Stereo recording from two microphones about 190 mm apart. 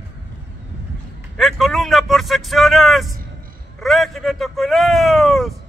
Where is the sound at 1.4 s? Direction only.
Centre (ahead or behind).